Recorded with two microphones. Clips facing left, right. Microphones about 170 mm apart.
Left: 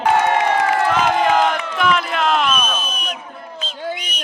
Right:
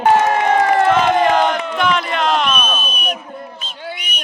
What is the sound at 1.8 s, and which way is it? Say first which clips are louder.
Speech: even; centre (ahead or behind).